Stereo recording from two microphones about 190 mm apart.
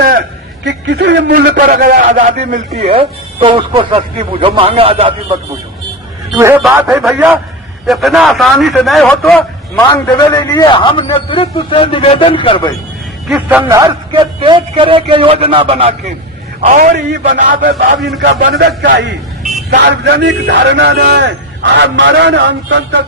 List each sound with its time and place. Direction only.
0.6 s a man's voice: 65° right (ahead or behind); by 5.4 s 30° right (ahead or behind)
6.3 s a man's voice: 10° right (ahead or behind)
9.9 s a man's voice: 20° left (ahead or behind)
13.2 s a man's voice: 5° right (ahead or behind); by 15.9 s 30° right (ahead or behind)
16.6 s a man's voice: 40° right (ahead or behind)
18.3 s a man's voice: 55° right (ahead or behind)